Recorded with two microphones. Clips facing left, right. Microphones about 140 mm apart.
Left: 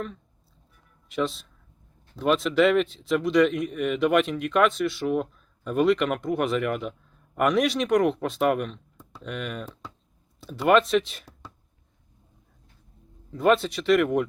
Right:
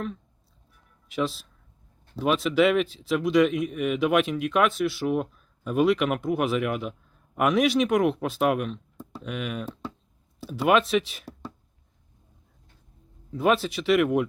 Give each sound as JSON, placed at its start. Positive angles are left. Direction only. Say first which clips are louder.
{"t": 1.0, "sound": "speech", "louder": "even", "side_deg": 0}
{"t": 13.3, "sound": "speech", "louder": "left 2 dB", "side_deg": -5}